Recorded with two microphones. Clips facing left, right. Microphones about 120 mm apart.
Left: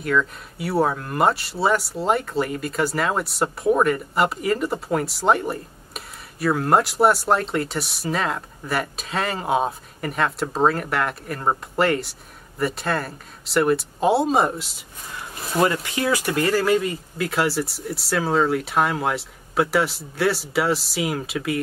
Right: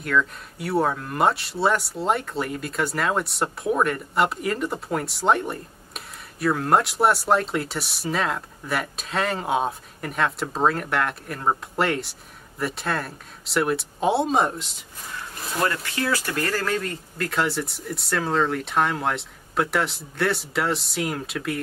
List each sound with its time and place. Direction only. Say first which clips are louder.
0.0 s speech: left 1 dB; centre (ahead or behind)
15.7 s speech: left 3 dB; 15° left (ahead or behind)